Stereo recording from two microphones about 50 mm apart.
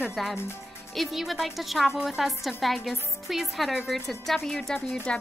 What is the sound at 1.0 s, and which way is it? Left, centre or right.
A woman's voice, centre.